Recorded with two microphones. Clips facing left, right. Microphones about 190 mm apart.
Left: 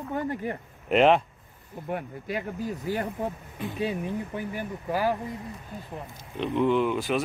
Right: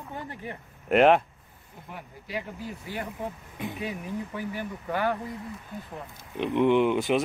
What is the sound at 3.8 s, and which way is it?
Speech, 30° left (ahead or behind).